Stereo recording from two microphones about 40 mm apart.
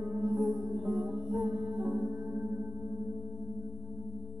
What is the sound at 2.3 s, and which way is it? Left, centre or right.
Music, right.